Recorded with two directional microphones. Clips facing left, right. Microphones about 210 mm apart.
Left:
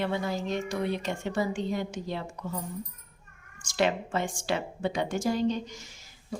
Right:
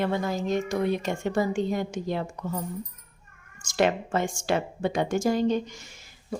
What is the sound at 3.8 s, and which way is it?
A woman's voice, 50° right (ahead or behind).